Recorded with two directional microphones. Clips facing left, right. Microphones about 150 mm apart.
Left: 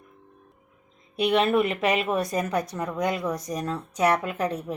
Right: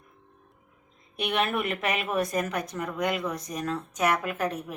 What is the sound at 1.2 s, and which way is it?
A woman's voice, 30° left (ahead or behind).